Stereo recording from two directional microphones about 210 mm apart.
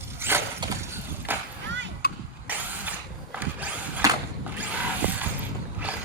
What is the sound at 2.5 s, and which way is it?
Vehicle, 10° right (ahead or behind).